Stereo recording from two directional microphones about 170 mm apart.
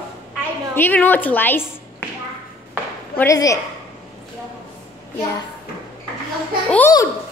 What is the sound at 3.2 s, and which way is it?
Speech, 20° left (ahead or behind).